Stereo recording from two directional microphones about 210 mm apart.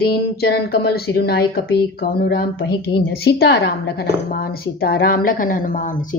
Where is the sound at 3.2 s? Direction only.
50° left (ahead or behind).